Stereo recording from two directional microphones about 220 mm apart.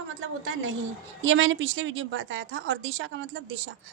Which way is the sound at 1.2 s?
60° right (ahead or behind).